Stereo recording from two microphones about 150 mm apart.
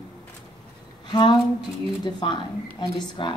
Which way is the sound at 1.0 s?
30° left (ahead or behind).